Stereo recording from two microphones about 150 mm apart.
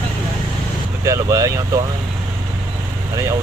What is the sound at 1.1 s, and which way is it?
Vehicle, 20° right (ahead or behind).